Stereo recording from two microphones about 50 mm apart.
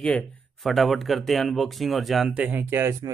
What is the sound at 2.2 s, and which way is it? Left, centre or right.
Speech, right.